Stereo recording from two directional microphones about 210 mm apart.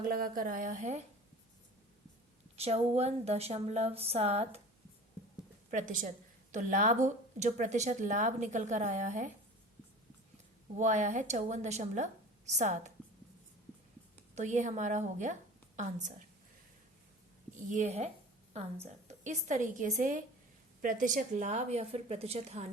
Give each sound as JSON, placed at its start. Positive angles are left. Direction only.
{"t": 0.0, "sound": "a woman's voice", "side_deg": -45}
{"t": 2.6, "sound": "a woman's voice", "side_deg": -30}
{"t": 5.7, "sound": "a woman's voice", "side_deg": -40}
{"t": 10.8, "sound": "a woman's voice", "side_deg": -35}
{"t": 14.3, "sound": "a woman's voice", "side_deg": -35}
{"t": 17.5, "sound": "a woman's voice", "side_deg": -35}